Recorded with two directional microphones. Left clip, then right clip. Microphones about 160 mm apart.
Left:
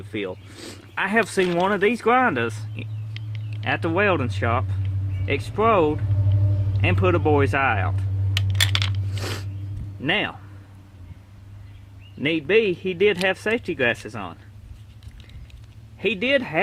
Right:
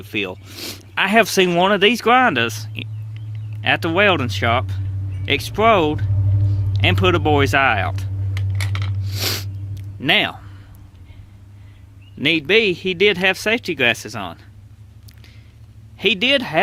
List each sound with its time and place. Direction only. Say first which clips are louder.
0.0 s speech: right 5 dB; 25° right (ahead or behind)
8.3 s computer keyboard: left 8 dB; 5° right (ahead or behind)
9.1 s a sound: right 9 dB; 20° right (ahead or behind)
10.0 s speech: right 6 dB; 25° right (ahead or behind)
12.2 s speech: right 4 dB; 20° right (ahead or behind)
16.0 s speech: right 5 dB; 20° right (ahead or behind)